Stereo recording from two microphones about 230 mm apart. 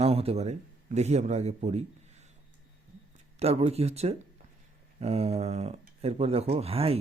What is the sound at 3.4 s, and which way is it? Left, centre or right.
Speech, right.